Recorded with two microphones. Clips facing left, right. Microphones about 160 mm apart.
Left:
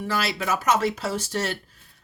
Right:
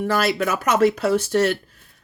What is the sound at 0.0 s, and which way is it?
Speech, 55° right (ahead or behind).